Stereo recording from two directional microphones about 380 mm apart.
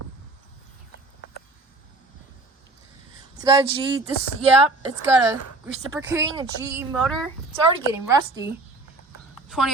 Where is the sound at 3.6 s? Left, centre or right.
Centre.